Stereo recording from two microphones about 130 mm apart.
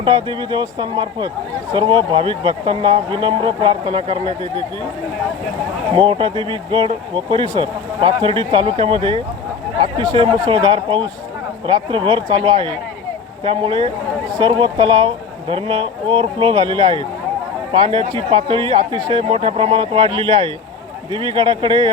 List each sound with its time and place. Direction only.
0.0 s speech: 35° right (ahead or behind)
5.9 s speech: 40° right (ahead or behind)